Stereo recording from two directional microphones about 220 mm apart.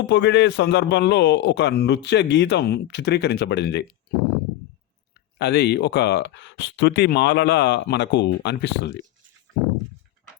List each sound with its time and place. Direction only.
0.0 s a man's voice: 50° left (ahead or behind)
5.4 s a man's voice: 50° left (ahead or behind)